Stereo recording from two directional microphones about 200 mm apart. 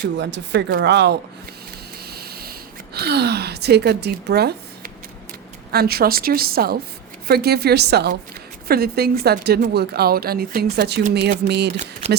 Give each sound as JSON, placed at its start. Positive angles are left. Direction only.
{"t": 0.2, "sound": "speech", "side_deg": -60}
{"t": 2.0, "sound": "a sound", "side_deg": -50}
{"t": 5.7, "sound": "a woman's voice", "side_deg": -50}